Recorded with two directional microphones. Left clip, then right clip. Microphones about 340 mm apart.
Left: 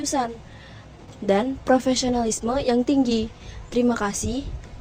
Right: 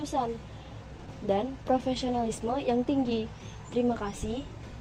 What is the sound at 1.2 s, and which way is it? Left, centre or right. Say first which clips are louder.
A woman's voice: left 8 dB; left.